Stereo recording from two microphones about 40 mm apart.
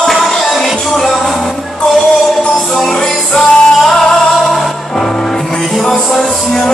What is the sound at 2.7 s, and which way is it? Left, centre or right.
Music, centre.